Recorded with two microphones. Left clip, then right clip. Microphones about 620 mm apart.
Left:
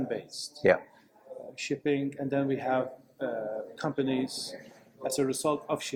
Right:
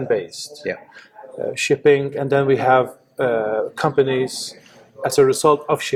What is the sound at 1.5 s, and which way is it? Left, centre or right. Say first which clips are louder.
Speech: right 15 dB; right.